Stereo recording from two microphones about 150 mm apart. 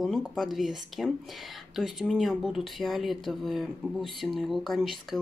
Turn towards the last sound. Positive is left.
turn(degrees=0)  # may be behind; listen again after turning